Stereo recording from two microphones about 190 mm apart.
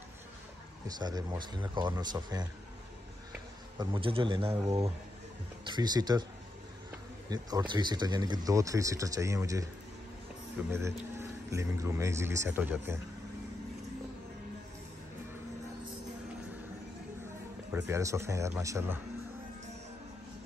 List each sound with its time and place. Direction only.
0.8 s speech: 20° right (ahead or behind)
3.7 s speech: 25° right (ahead or behind)
5.7 s speech: 20° right (ahead or behind)
7.2 s speech: 20° right (ahead or behind)
10.7 s speech: 15° right (ahead or behind)
17.7 s speech: 15° right (ahead or behind)